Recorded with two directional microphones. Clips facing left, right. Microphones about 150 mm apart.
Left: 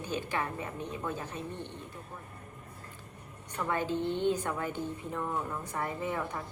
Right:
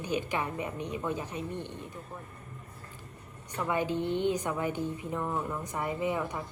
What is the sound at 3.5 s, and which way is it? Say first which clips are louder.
A woman's voice: right 2 dB; 10° right (ahead or behind).